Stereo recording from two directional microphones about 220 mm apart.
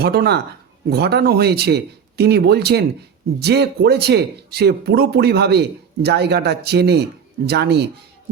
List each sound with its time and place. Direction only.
0.0 s speech: 45° right (ahead or behind)